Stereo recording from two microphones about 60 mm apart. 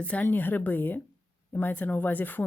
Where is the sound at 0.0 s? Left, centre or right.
Left.